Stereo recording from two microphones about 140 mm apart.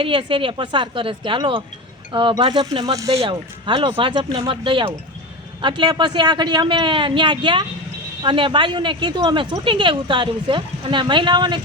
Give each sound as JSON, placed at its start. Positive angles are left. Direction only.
{"t": 0.0, "sound": "speech", "side_deg": -35}